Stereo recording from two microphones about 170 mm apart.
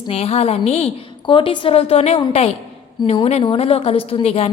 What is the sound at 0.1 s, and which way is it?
A woman's voice, 35° left (ahead or behind).